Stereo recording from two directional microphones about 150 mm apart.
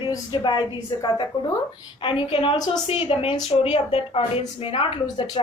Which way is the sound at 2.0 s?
35° left (ahead or behind).